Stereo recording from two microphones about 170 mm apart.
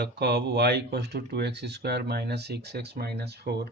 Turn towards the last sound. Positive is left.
turn(degrees=-70)  # may be behind; listen again after turning